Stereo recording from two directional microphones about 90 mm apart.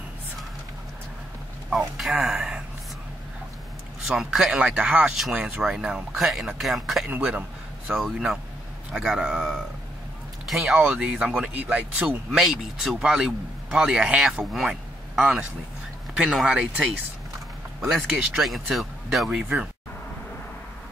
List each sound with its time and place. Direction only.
1.7 s speech: 5° right (ahead or behind)
4.0 s a man's voice: 5° right (ahead or behind)
5.3 s a man's voice: 15° right (ahead or behind)
5.7 s speech: 5° right (ahead or behind)
7.1 s a man's voice: 15° right (ahead or behind)
8.1 s a man's voice: 5° right (ahead or behind)